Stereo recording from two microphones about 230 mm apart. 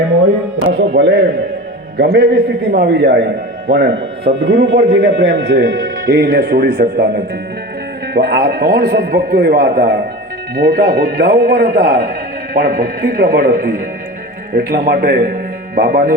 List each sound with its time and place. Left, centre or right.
0.6 s a man's voice: right
8.1 s a man's voice: right